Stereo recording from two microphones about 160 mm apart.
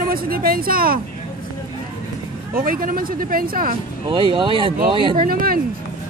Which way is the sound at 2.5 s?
60° right (ahead or behind).